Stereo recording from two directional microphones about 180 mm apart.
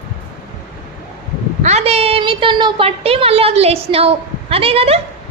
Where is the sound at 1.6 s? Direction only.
40° right (ahead or behind).